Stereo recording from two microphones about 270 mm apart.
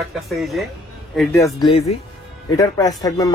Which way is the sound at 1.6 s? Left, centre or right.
Left.